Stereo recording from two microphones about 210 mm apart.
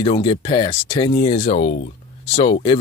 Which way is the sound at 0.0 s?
25° left (ahead or behind).